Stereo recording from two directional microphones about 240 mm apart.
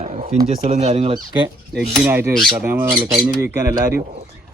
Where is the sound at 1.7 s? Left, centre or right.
Centre.